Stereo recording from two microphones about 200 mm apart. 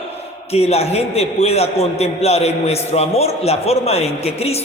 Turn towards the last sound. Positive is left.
turn(degrees=30)  # may be behind; listen again after turning